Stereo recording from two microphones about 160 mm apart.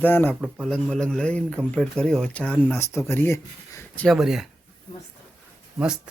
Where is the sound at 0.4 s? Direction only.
5° right (ahead or behind).